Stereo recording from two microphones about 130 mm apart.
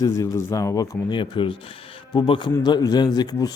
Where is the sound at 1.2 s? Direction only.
40° left (ahead or behind).